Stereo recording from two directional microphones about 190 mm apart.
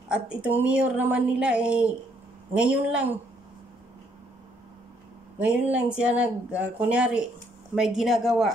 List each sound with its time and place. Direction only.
0.1 s speech: 5° right (ahead or behind)
5.4 s speech: 5° right (ahead or behind)